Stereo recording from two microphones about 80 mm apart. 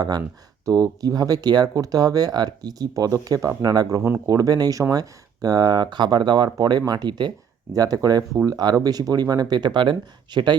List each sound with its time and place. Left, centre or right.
0.6 s speech: right
7.1 s speech: right
7.7 s speech: right